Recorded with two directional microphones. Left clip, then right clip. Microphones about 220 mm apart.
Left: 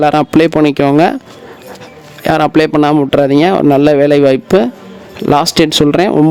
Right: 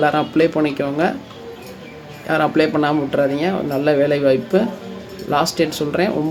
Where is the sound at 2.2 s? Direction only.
45° left (ahead or behind).